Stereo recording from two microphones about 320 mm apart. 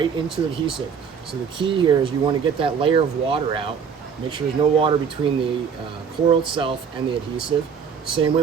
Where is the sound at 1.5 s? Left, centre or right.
Centre.